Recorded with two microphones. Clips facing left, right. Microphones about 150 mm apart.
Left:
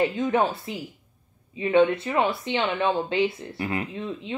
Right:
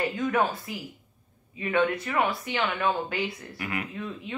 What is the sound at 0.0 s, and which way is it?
Speech, 25° left (ahead or behind).